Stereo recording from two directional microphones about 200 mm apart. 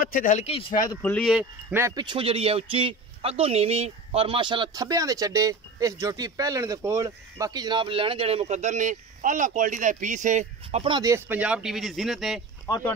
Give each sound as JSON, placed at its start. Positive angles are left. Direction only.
{"t": 0.0, "sound": "speech", "side_deg": 45}
{"t": 0.8, "sound": "speech", "side_deg": 10}
{"t": 1.2, "sound": "speech", "side_deg": 0}
{"t": 1.8, "sound": "a man's voice", "side_deg": -20}
{"t": 12.6, "sound": "speech", "side_deg": 10}